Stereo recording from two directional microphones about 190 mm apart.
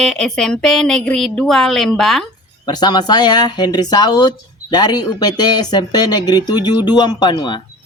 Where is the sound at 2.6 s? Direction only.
20° left (ahead or behind).